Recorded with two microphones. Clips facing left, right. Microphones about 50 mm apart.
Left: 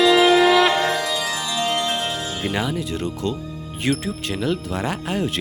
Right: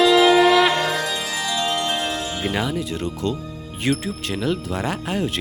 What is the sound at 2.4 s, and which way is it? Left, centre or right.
Speech, centre.